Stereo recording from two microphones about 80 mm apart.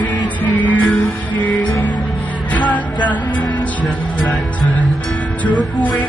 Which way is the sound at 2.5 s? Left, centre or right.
Left.